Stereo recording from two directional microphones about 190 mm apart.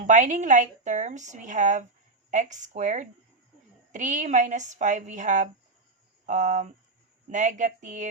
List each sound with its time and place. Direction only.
0.0 s a woman's voice: 40° right (ahead or behind)